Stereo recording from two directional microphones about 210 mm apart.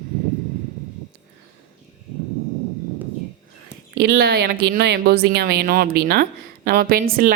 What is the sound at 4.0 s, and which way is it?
Speech, 50° right (ahead or behind).